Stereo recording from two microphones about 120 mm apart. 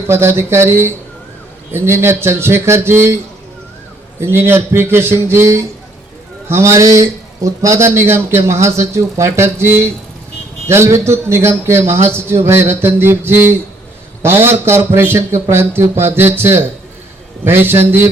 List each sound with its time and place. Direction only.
0.1 s speech: 20° right (ahead or behind)
4.2 s speech: 20° right (ahead or behind)